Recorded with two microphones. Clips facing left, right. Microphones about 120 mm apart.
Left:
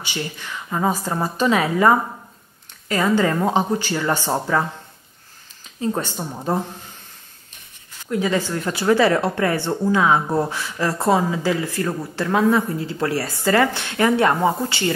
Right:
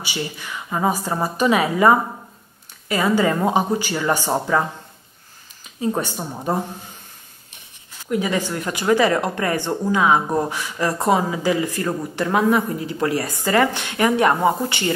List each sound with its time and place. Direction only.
0.0 s speech: 10° right (ahead or behind)
5.8 s speech: 15° right (ahead or behind)
8.1 s speech: 15° right (ahead or behind)